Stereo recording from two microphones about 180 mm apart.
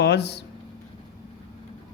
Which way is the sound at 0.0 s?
65° left (ahead or behind).